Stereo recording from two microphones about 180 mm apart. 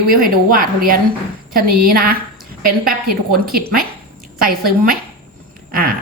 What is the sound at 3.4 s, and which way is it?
A woman's voice, 55° right (ahead or behind).